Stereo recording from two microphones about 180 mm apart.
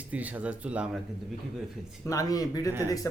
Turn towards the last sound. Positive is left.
turn(degrees=20)  # may be behind; listen again after turning